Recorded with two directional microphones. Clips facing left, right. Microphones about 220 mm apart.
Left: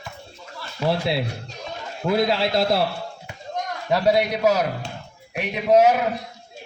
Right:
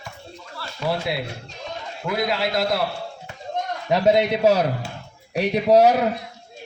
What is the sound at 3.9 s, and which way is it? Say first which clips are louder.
A man's voice: right 2 dB; 20° right (ahead or behind).